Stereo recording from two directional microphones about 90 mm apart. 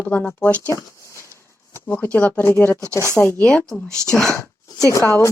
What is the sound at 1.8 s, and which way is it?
Speech, 20° left (ahead or behind).